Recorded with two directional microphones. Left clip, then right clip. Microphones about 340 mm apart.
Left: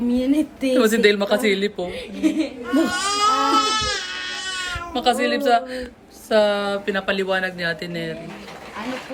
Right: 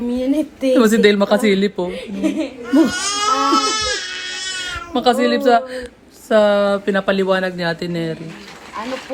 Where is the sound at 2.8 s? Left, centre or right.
Centre.